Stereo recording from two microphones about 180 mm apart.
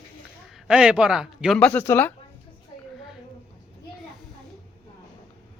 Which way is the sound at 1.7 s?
10° left (ahead or behind).